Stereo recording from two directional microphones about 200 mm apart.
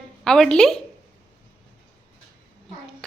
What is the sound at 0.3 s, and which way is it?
Speech, 5° left (ahead or behind).